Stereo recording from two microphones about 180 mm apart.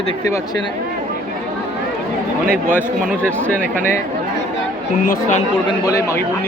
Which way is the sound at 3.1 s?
5° left (ahead or behind).